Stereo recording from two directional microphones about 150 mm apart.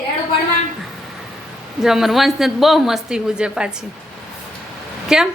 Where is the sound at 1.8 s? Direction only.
5° right (ahead or behind).